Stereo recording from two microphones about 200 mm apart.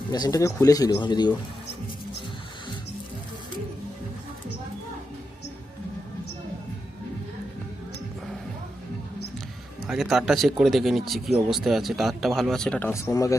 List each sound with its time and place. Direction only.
0.1 s speech: 20° left (ahead or behind)
9.8 s speech: centre (ahead or behind); by 13.3 s 15° left (ahead or behind)